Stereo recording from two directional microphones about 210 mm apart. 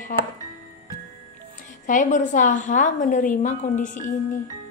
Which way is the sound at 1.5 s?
40° left (ahead or behind).